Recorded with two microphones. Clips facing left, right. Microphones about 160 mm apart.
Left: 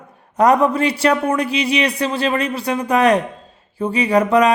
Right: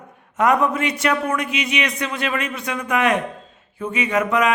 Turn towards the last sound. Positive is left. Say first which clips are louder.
# left 5 dB
turn(degrees=35)  # may be behind; listen again after turning